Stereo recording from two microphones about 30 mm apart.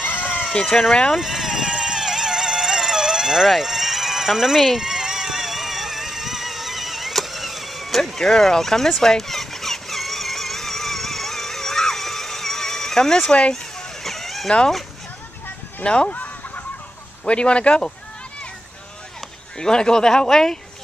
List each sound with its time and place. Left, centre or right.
0.0 s a sound: left
0.7 s speech: centre
1.1 s vehicle: centre
9.0 s squeal: centre
14.0 s a sound: centre
15.8 s speech: left
16.1 s chicken: left
17.3 s speech: left
19.6 s speech: left